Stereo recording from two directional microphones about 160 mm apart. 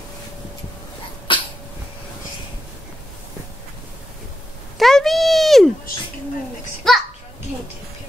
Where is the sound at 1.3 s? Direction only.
30° left (ahead or behind).